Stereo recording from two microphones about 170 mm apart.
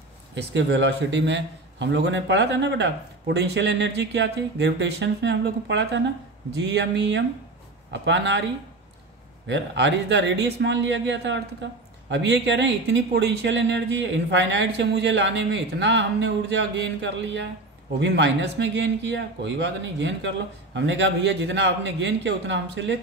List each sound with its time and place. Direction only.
0.3 s a man's voice: 90° right
9.5 s a man's voice: 90° right